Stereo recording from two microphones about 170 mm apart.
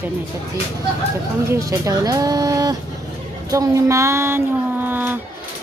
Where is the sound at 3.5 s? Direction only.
20° right (ahead or behind).